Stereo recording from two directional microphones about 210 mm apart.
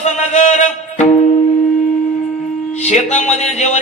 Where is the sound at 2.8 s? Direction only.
35° left (ahead or behind).